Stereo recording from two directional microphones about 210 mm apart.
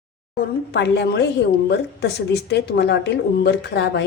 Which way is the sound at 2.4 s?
50° left (ahead or behind).